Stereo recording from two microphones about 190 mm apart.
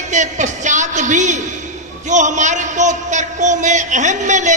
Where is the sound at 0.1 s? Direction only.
40° right (ahead or behind).